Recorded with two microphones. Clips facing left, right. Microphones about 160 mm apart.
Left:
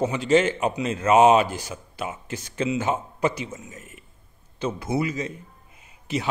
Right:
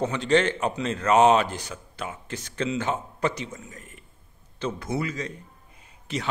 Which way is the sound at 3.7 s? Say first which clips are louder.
Left 2 dB; 10° left (ahead or behind).